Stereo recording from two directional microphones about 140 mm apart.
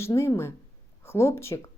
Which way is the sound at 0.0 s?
20° left (ahead or behind).